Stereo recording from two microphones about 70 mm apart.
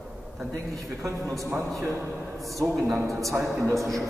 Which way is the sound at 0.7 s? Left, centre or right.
Right.